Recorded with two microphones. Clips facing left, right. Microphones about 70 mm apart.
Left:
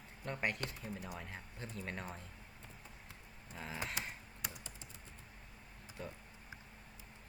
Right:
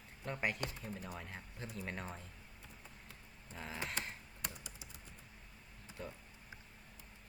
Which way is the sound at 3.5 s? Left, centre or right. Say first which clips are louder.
Even; centre.